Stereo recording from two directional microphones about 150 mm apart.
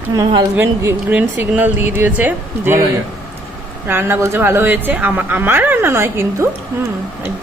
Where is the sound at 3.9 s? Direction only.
15° right (ahead or behind).